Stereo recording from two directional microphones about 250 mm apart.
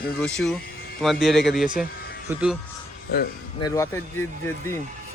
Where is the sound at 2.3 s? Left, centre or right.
Centre.